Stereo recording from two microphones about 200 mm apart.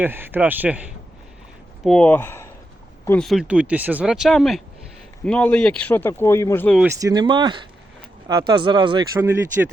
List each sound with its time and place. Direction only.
0.0 s a man's voice: 10° right (ahead or behind)
1.8 s speech: 5° left (ahead or behind)
7.0 s speech: 20° right (ahead or behind)